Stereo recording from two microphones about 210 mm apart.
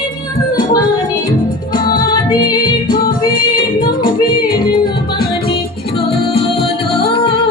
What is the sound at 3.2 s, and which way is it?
Music, 25° left (ahead or behind).